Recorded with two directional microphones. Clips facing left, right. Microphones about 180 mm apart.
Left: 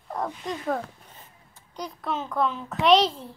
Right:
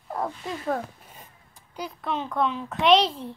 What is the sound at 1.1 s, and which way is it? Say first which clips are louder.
Speech: right 1 dB; 10° right (ahead or behind).